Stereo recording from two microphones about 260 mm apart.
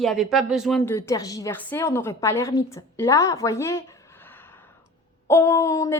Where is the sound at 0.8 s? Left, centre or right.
Centre.